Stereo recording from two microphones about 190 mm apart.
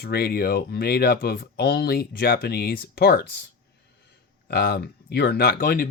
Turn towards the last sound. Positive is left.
turn(degrees=50)  # may be behind; listen again after turning